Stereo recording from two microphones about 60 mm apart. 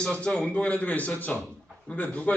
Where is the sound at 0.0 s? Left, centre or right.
Centre.